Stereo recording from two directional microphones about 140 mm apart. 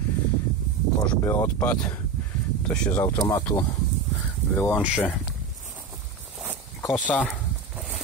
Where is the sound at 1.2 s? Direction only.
15° left (ahead or behind).